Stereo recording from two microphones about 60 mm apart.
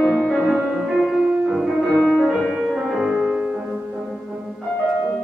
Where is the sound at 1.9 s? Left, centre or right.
Left.